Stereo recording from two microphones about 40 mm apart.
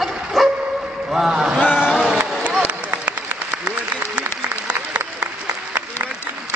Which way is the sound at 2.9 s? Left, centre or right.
Right.